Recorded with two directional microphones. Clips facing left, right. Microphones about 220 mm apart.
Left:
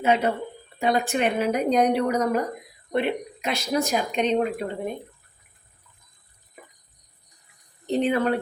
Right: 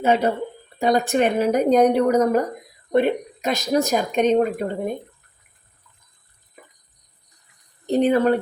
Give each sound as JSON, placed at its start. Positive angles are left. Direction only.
{"t": 0.0, "sound": "speech", "side_deg": -40}
{"t": 7.9, "sound": "speech", "side_deg": -40}